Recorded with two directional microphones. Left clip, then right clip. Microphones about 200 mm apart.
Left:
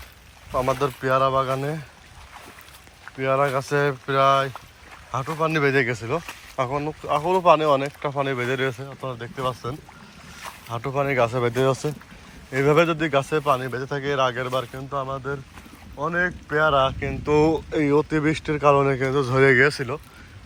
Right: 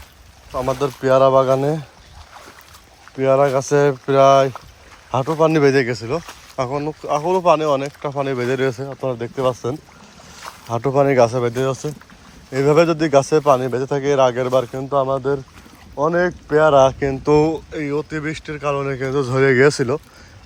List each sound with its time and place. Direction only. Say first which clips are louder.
0.5 s speech: right 1 dB; 10° right (ahead or behind)
0.8 s a man's voice: right 5 dB; 20° right (ahead or behind)
1.1 s speech: right 9 dB; 30° right (ahead or behind)
3.2 s a man's voice: right 6 dB; 25° right (ahead or behind)
5.1 s speech: right 8 dB; 40° right (ahead or behind)
5.8 s a man's voice: right 3 dB; 25° right (ahead or behind)
8.7 s a man's voice: right 9 dB; 35° right (ahead or behind)
11.4 s a man's voice: right 1 dB; 15° right (ahead or behind)
17.7 s speech: left 3 dB; centre (ahead or behind)
19.6 s a man's voice: right 6 dB; 30° right (ahead or behind)